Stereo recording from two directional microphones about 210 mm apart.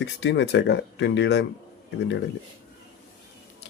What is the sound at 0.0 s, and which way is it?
Speech, 55° left (ahead or behind).